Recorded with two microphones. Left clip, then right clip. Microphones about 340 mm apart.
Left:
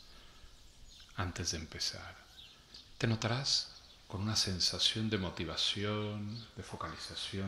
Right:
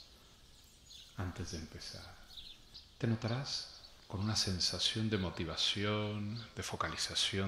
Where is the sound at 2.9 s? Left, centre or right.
Left.